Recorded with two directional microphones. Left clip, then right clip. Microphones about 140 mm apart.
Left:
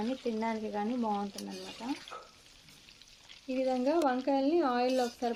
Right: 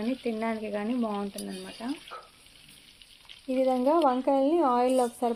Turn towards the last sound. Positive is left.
turn(degrees=-25)  # may be behind; listen again after turning